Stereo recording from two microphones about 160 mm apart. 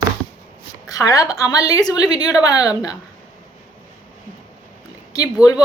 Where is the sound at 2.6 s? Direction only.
5° right (ahead or behind).